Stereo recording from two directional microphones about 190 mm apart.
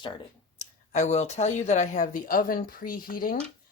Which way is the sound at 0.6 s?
35° left (ahead or behind).